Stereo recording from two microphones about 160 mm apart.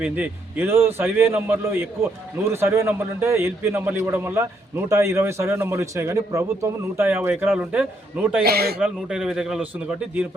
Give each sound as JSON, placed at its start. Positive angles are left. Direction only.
{"t": 0.0, "sound": "a man's voice", "side_deg": -10}
{"t": 8.4, "sound": "speech", "side_deg": -75}
{"t": 8.8, "sound": "speech", "side_deg": -5}